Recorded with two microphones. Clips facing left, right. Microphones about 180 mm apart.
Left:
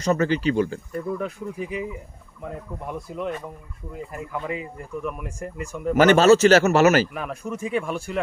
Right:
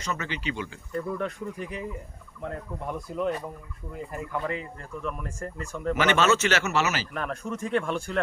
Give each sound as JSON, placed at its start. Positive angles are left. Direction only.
{"t": 0.0, "sound": "speech", "side_deg": 40}
{"t": 1.2, "sound": "speech", "side_deg": 5}
{"t": 3.1, "sound": "speech", "side_deg": 5}
{"t": 6.0, "sound": "speech", "side_deg": 40}
{"t": 7.1, "sound": "speech", "side_deg": 5}